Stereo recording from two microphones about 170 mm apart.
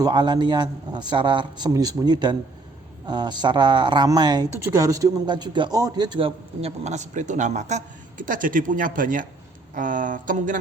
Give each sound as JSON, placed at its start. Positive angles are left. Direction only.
{"t": 0.0, "sound": "speech", "side_deg": -25}